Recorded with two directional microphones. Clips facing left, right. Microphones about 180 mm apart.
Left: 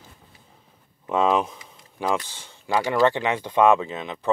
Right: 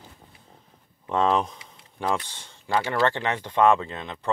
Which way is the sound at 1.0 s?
5° left (ahead or behind).